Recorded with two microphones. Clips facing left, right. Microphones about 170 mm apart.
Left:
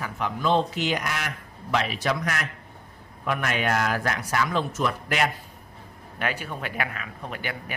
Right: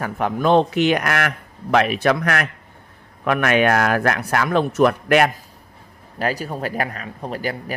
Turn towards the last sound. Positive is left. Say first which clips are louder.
# right 7 dB
turn(degrees=-35)  # may be behind; listen again after turning